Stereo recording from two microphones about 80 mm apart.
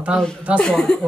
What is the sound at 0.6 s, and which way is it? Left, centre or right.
Speech, centre.